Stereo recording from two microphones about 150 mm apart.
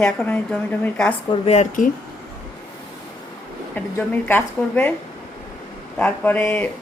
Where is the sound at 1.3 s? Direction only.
45° left (ahead or behind).